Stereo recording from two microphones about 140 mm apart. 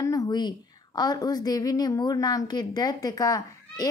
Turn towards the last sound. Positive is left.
turn(degrees=25)  # may be behind; listen again after turning